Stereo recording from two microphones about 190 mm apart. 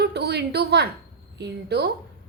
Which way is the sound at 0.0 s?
60° right (ahead or behind).